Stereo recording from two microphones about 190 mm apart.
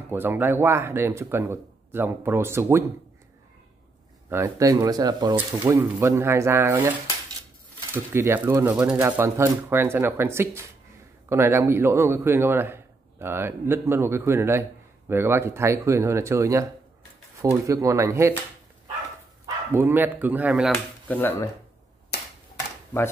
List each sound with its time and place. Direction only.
0.1 s a man's voice: 10° right (ahead or behind)
4.3 s a man's voice: 15° right (ahead or behind)
5.3 s a man's voice: 10° right (ahead or behind)
19.4 s speech: 10° right (ahead or behind)
20.7 s speech: 10° left (ahead or behind)
22.1 s a sound: 60° left (ahead or behind)